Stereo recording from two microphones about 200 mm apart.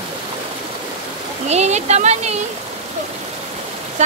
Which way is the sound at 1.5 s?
35° right (ahead or behind).